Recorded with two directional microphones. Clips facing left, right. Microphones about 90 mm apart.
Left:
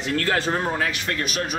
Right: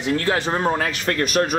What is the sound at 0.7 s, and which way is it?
Speech, 40° right (ahead or behind).